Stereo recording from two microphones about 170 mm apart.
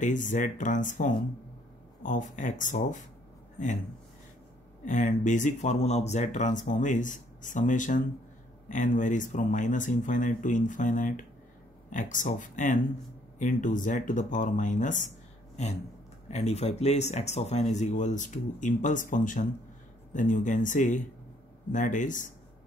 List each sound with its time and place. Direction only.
0.0 s speech: 50° left (ahead or behind)
4.8 s speech: 45° left (ahead or behind)